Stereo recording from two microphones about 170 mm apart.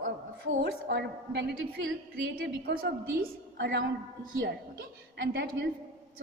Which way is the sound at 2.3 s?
70° right (ahead or behind).